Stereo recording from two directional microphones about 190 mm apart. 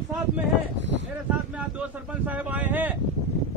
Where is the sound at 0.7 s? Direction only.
70° right (ahead or behind).